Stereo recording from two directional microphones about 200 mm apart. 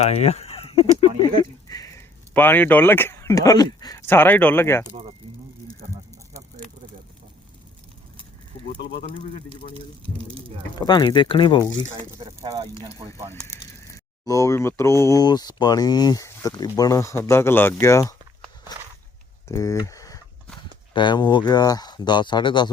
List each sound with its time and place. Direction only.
0.0 s speech: 30° left (ahead or behind)
1.7 s speech: 15° left (ahead or behind)
8.8 s speech: 55° left (ahead or behind)
10.2 s speech: 25° right (ahead or behind)
10.8 s speech: 20° left (ahead or behind)
12.2 s a sound: 15° right (ahead or behind)
14.3 s speech: 15° left (ahead or behind)
19.5 s a sound: 15° left (ahead or behind)
20.9 s speech: 25° left (ahead or behind)